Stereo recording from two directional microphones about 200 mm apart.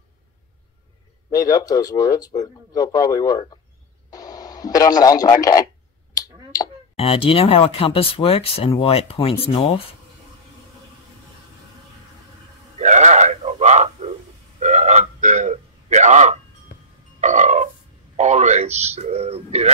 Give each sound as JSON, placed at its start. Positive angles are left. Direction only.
{"t": 1.3, "sound": "speech", "side_deg": 15}
{"t": 4.1, "sound": "radio", "side_deg": 20}
{"t": 6.1, "sound": "finger snapping", "side_deg": 20}
{"t": 7.0, "sound": "speech", "side_deg": 30}
{"t": 12.7, "sound": "a sound", "side_deg": -35}
{"t": 17.2, "sound": "music", "side_deg": -35}
{"t": 18.1, "sound": "a sound", "side_deg": -35}